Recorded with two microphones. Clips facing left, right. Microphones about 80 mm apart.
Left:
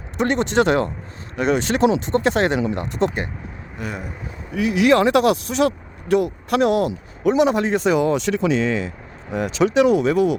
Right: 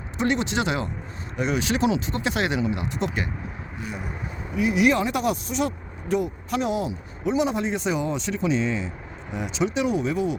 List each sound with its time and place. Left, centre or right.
0.2 s speech: left
3.8 s speech: left
4.5 s speech: left
9.3 s speech: left